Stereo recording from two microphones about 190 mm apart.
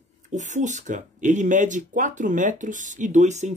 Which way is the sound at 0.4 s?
40° right (ahead or behind).